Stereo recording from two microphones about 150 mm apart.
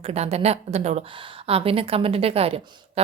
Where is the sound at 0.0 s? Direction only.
45° right (ahead or behind).